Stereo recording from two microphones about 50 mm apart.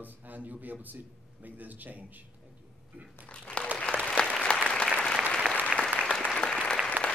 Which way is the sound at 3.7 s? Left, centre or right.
Left.